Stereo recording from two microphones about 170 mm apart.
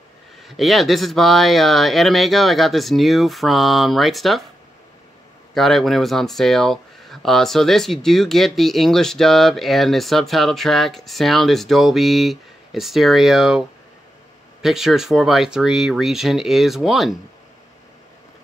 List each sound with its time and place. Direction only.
0.4 s speech: centre (ahead or behind)
5.5 s speech: centre (ahead or behind)